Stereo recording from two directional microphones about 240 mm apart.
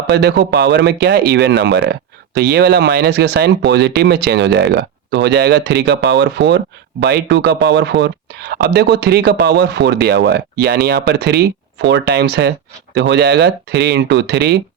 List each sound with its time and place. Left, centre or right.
0.1 s speech: right